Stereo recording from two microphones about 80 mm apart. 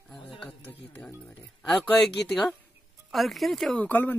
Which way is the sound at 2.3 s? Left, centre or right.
Centre.